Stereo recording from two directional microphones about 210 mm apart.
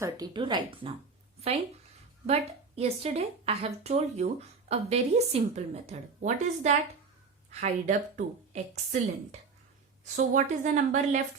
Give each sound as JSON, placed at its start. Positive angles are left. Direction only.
{"t": 0.0, "sound": "speech", "side_deg": -20}
{"t": 2.2, "sound": "a woman's voice", "side_deg": -30}
{"t": 10.2, "sound": "a woman's voice", "side_deg": -35}